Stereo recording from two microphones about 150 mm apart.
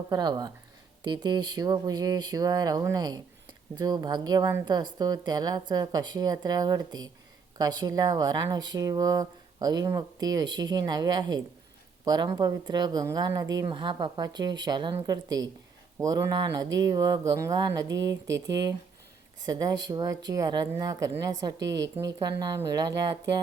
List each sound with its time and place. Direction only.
0.1 s speech: 30° right (ahead or behind)
19.4 s speech: 25° right (ahead or behind)